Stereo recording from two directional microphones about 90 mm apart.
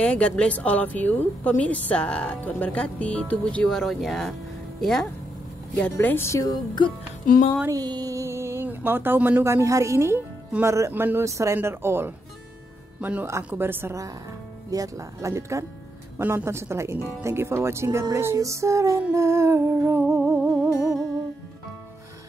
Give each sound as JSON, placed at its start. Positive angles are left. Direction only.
{"t": 0.0, "sound": "a woman's voice", "side_deg": 15}
{"t": 5.8, "sound": "a woman's voice", "side_deg": 20}
{"t": 6.5, "sound": "speech", "side_deg": 60}
{"t": 7.7, "sound": "speech", "side_deg": -45}
{"t": 14.7, "sound": "speech", "side_deg": -40}
{"t": 16.2, "sound": "speech", "side_deg": -25}